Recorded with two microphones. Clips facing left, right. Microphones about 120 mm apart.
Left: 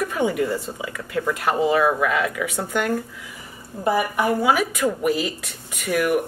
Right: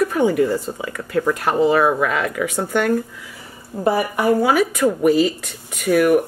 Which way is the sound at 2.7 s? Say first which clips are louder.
Right 5 dB; 35° right (ahead or behind).